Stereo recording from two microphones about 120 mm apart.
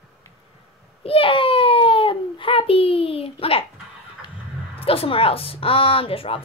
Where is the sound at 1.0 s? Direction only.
50° left (ahead or behind).